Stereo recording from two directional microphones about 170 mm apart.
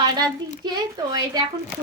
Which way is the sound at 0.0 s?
25° right (ahead or behind).